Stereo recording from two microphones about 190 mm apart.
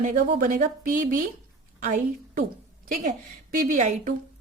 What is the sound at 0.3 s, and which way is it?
A woman's voice, 45° right (ahead or behind).